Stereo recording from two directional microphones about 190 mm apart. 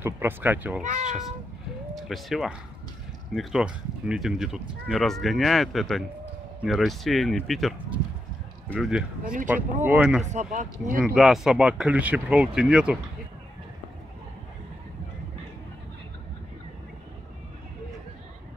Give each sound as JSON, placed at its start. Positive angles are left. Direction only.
{"t": 0.0, "sound": "speech", "side_deg": -10}
{"t": 0.8, "sound": "speech", "side_deg": -40}
{"t": 2.0, "sound": "speech", "side_deg": 0}
{"t": 9.2, "sound": "speech", "side_deg": -45}
{"t": 9.8, "sound": "speech", "side_deg": -5}
{"t": 10.2, "sound": "speech", "side_deg": -40}
{"t": 11.1, "sound": "speech", "side_deg": 0}